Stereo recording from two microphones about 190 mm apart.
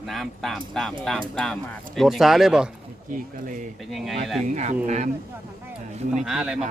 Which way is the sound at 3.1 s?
45° right (ahead or behind).